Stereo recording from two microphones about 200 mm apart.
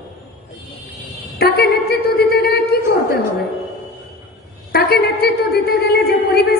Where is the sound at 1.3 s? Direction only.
50° left (ahead or behind).